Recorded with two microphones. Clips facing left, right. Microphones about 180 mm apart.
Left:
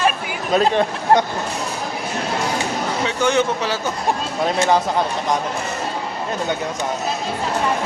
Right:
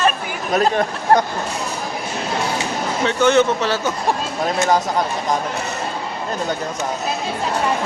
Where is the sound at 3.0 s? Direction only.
15° left (ahead or behind).